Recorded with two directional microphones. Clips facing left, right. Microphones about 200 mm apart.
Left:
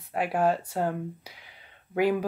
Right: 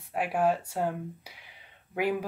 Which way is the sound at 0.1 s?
5° right (ahead or behind).